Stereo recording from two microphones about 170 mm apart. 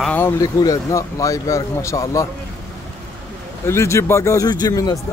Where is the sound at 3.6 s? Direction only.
15° left (ahead or behind).